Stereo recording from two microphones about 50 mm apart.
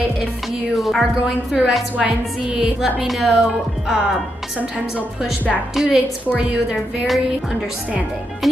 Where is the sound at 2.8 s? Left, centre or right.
Centre.